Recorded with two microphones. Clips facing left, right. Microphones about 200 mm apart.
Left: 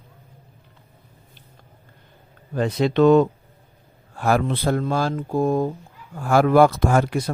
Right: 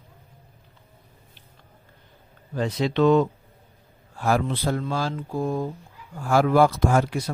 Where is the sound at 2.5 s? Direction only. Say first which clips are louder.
Left 4 dB; 55° left (ahead or behind).